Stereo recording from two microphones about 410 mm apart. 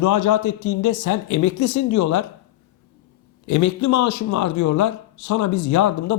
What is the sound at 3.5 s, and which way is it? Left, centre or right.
Speech, left.